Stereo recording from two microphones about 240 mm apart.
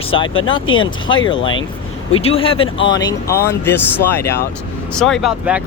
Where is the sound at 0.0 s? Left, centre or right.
Left.